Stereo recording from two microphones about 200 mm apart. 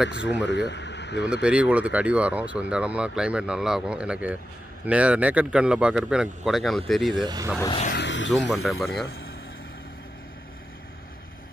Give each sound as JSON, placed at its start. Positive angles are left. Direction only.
{"t": 0.1, "sound": "speech", "side_deg": 65}
{"t": 1.3, "sound": "speech", "side_deg": -5}
{"t": 7.2, "sound": "speech", "side_deg": -20}
{"t": 7.9, "sound": "vehicle", "side_deg": 65}
{"t": 8.6, "sound": "speech", "side_deg": 0}